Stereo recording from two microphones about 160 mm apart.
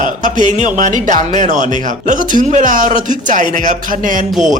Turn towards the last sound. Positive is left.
turn(degrees=-55)  # may be behind; listen again after turning